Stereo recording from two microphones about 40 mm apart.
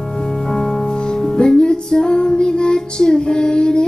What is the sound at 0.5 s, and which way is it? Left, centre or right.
Music, centre.